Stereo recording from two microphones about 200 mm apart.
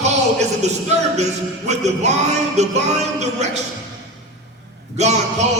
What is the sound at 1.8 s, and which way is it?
A man's voice, 35° right (ahead or behind).